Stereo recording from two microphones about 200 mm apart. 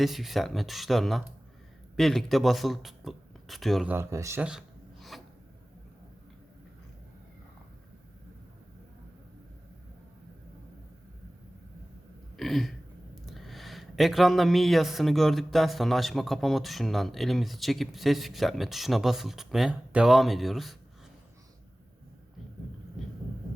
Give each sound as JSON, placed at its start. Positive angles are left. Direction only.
{"t": 0.0, "sound": "speech", "side_deg": 0}
{"t": 3.9, "sound": "speech", "side_deg": -15}
{"t": 12.4, "sound": "burping", "side_deg": 0}
{"t": 13.2, "sound": "speech", "side_deg": 0}